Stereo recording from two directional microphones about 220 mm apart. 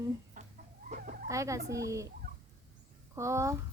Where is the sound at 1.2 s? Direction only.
15° right (ahead or behind).